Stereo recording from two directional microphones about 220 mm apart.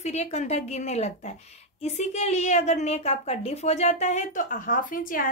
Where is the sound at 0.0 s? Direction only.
30° left (ahead or behind).